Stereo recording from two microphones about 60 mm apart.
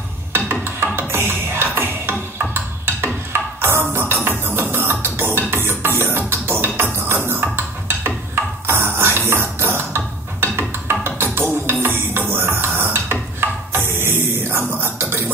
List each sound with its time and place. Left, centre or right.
0.3 s music: right
8.6 s music: right
12.3 s a sound: right